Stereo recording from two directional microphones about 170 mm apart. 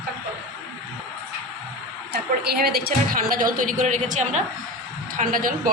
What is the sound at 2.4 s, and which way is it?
A man's voice, 70° right (ahead or behind).